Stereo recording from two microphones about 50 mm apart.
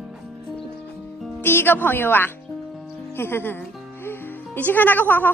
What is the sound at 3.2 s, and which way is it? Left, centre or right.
Music, left.